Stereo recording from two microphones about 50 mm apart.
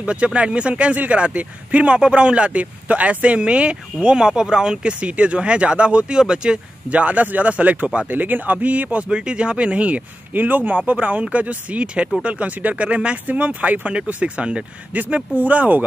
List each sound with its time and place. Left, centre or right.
0.0 s speech: right
6.9 s speech: right
9.1 s speech: centre
10.3 s speech: right